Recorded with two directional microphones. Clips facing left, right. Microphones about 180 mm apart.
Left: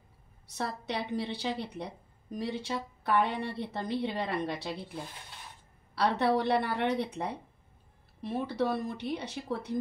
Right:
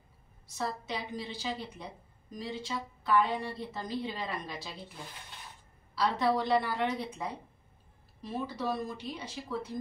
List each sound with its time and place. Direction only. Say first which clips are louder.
0.6 s a woman's voice: left 2 dB; 65° left (ahead or behind)
5.9 s a woman's voice: left 2 dB; 60° left (ahead or behind)